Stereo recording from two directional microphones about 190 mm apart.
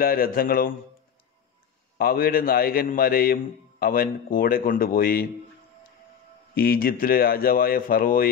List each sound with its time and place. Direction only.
0.0 s a man's voice: 50° left (ahead or behind)
2.0 s a man's voice: 50° left (ahead or behind)
6.5 s a man's voice: 50° left (ahead or behind)